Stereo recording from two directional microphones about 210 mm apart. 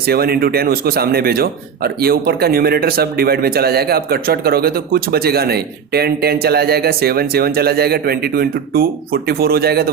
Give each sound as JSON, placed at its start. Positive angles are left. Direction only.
{"t": 0.0, "sound": "speech", "side_deg": -45}